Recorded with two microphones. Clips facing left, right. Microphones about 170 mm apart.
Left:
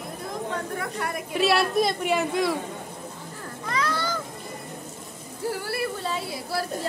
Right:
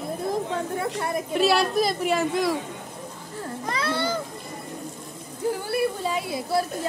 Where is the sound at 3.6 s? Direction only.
30° right (ahead or behind).